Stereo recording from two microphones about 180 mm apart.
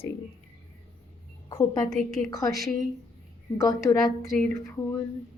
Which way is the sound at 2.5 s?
Centre (ahead or behind).